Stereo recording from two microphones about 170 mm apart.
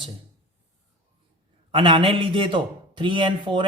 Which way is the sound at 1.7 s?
30° right (ahead or behind).